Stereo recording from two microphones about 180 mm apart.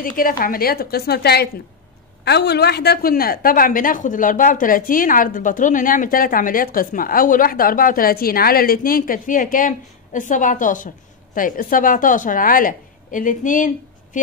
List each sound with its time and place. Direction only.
0.0 s a woman's voice: 50° left (ahead or behind)